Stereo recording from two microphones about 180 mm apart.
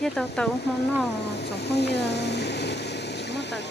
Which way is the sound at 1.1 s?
65° left (ahead or behind).